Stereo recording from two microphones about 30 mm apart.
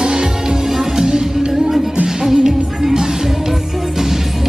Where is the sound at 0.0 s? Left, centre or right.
Right.